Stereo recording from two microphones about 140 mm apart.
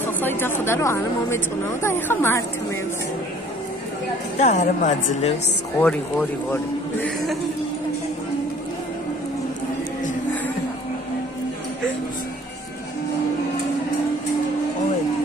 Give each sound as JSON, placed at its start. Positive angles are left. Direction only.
{"t": 0.0, "sound": "speech", "side_deg": 15}
{"t": 4.4, "sound": "speech", "side_deg": 55}
{"t": 5.8, "sound": "speech", "side_deg": 10}